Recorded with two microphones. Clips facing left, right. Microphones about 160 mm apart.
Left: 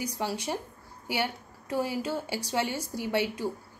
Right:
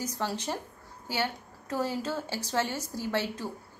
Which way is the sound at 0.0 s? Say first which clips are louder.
Left 1 dB; 10° left (ahead or behind).